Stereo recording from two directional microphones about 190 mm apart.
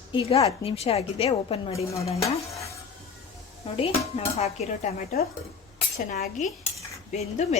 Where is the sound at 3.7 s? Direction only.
30° left (ahead or behind).